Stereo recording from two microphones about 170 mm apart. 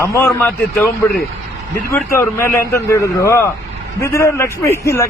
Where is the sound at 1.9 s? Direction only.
15° left (ahead or behind).